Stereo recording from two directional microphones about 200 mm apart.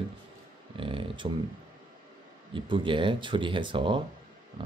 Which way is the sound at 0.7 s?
25° right (ahead or behind).